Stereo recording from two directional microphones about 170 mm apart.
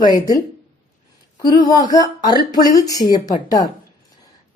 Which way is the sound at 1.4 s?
25° left (ahead or behind).